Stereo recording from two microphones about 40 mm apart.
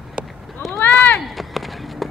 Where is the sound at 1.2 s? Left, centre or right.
Centre.